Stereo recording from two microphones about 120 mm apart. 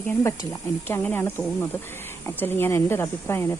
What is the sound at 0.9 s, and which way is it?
Speech, 20° left (ahead or behind).